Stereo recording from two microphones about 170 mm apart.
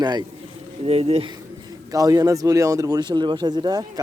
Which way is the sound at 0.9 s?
35° right (ahead or behind).